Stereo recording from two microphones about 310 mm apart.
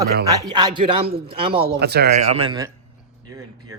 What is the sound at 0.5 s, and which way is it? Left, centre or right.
A man's voice, centre.